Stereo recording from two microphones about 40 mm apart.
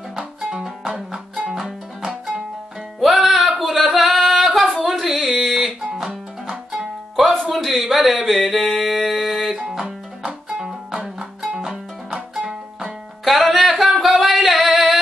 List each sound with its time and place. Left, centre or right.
0.7 s music: centre
3.8 s singing: centre
5.4 s music: centre
7.2 s a sound: centre
9.6 s music: centre
11.0 s music: right
13.2 s music: centre
13.9 s singing: centre